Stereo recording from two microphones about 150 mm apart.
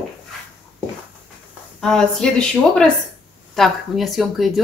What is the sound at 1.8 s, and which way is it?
Speech, 5° left (ahead or behind).